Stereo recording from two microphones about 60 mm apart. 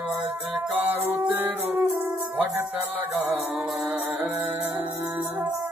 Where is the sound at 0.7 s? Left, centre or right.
Right.